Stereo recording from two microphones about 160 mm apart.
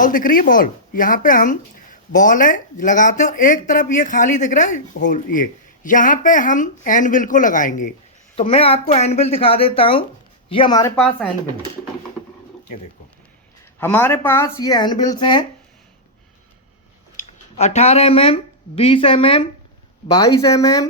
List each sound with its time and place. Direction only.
0.0 s speech: 60° left (ahead or behind)
8.4 s speech: 35° left (ahead or behind)
13.7 s speech: 15° left (ahead or behind); by 15.4 s 30° left (ahead or behind)
17.2 s speech: 45° left (ahead or behind)
20.2 s speech: 20° left (ahead or behind)